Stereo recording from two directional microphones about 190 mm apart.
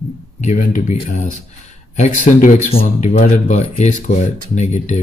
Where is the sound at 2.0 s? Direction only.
40° left (ahead or behind).